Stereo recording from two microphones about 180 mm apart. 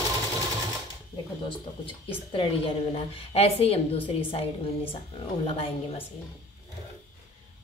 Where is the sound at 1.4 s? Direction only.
30° left (ahead or behind).